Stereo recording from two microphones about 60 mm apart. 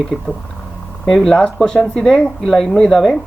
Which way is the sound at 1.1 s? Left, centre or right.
Centre.